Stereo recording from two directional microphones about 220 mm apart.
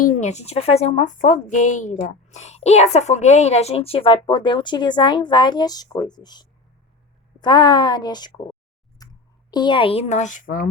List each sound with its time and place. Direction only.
0.0 s a woman's voice: 35° left (ahead or behind); by 8.3 s 20° left (ahead or behind)
9.0 s a sound: 15° left (ahead or behind)
9.5 s a woman's voice: 20° left (ahead or behind); by 10.7 s 40° left (ahead or behind)